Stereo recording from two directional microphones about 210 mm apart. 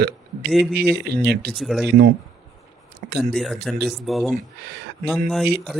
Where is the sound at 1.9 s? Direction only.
50° right (ahead or behind).